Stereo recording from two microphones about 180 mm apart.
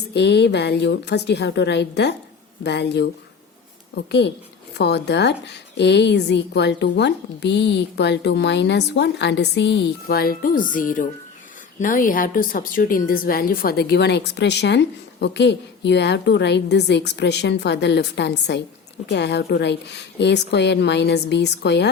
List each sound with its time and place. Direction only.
0.1 s a woman's voice: 70° left (ahead or behind)